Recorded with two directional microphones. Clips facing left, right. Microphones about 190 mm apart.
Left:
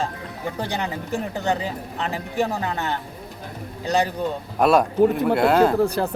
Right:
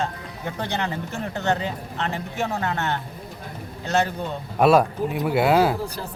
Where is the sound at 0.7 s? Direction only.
10° left (ahead or behind).